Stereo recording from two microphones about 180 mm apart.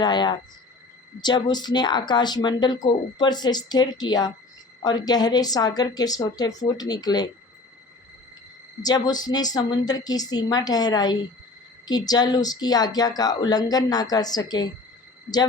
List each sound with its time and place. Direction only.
0.0 s speech: 25° left (ahead or behind)
8.8 s speech: 20° left (ahead or behind)